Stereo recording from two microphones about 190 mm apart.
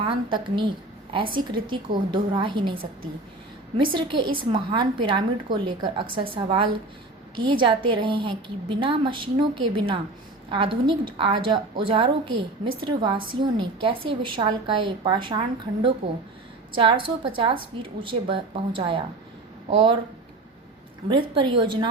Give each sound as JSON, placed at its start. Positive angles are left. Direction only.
{"t": 0.0, "sound": "a woman's voice", "side_deg": -25}
{"t": 3.8, "sound": "a woman's voice", "side_deg": -25}
{"t": 21.1, "sound": "a woman's voice", "side_deg": -25}